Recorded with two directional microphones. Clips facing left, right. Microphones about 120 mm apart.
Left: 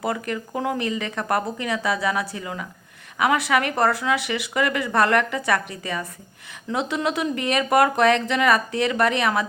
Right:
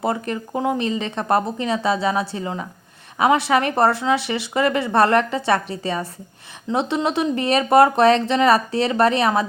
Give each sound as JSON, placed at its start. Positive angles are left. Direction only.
{"t": 0.0, "sound": "speech", "side_deg": -25}